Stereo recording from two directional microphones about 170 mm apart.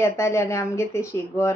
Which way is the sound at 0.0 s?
15° left (ahead or behind).